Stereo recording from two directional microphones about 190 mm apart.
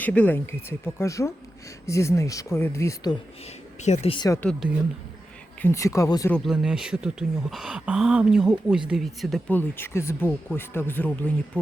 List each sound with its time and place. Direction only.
0.0 s speech: 10° left (ahead or behind)
3.8 s speech: 35° left (ahead or behind)
5.6 s speech: 15° left (ahead or behind)
6.3 s speech: centre (ahead or behind)